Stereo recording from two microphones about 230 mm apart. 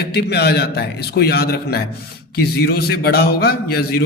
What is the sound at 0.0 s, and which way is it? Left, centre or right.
A man's voice, left.